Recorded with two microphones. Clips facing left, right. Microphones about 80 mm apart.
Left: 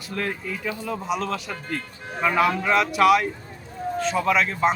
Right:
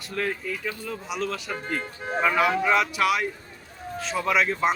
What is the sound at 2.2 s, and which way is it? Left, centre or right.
A man's voice, centre.